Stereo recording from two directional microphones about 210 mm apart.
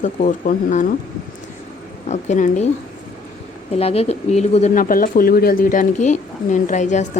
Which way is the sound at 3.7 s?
30° left (ahead or behind).